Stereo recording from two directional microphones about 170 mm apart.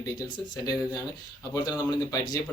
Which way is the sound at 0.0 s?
20° left (ahead or behind).